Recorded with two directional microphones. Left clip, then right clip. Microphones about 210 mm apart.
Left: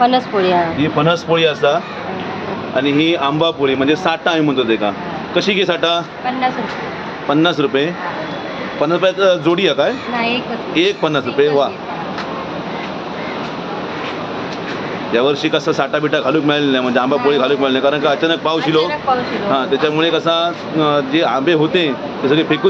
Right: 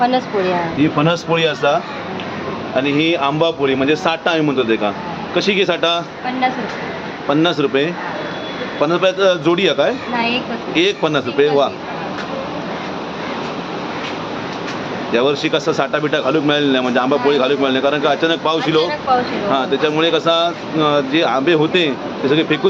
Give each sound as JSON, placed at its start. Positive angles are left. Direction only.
{"t": 0.0, "sound": "speech", "side_deg": 35}
{"t": 0.8, "sound": "speech", "side_deg": 0}
{"t": 7.3, "sound": "speech", "side_deg": 0}
{"t": 15.1, "sound": "speech", "side_deg": 0}